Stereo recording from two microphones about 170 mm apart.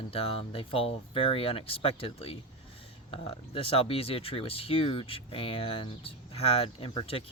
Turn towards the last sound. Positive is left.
turn(degrees=35)  # may be behind; listen again after turning